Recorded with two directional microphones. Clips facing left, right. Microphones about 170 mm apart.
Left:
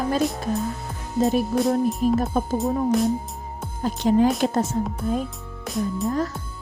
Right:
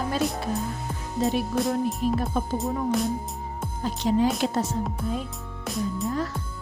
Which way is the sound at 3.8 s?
50° left (ahead or behind).